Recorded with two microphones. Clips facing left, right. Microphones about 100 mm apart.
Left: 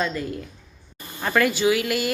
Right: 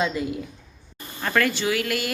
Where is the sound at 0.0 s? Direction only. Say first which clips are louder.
Right 1 dB; 10° right (ahead or behind).